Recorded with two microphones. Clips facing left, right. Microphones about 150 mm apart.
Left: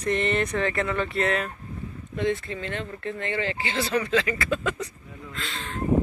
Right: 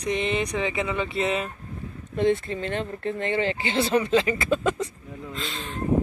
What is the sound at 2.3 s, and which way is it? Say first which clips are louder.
Speech: right 4 dB; 35° right (ahead or behind).